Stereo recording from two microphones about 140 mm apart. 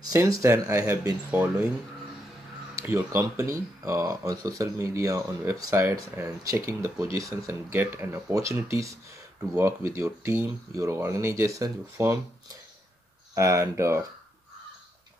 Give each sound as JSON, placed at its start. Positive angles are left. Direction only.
{"t": 0.4, "sound": "speech", "side_deg": -20}
{"t": 2.8, "sound": "speech", "side_deg": -15}
{"t": 13.3, "sound": "speech", "side_deg": -20}